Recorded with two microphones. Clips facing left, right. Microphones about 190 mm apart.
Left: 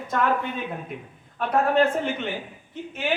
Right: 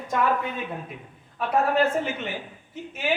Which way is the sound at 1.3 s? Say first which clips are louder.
Left 2 dB; 5° right (ahead or behind).